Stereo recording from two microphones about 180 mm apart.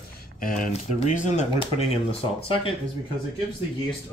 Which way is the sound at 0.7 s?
40° left (ahead or behind).